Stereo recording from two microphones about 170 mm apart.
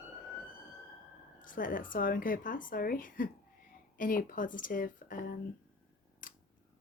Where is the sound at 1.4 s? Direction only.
50° left (ahead or behind).